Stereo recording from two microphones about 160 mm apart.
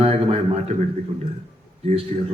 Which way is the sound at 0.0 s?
40° right (ahead or behind).